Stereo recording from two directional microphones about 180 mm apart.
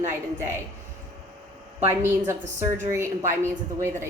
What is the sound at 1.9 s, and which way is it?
A woman's voice, 15° right (ahead or behind).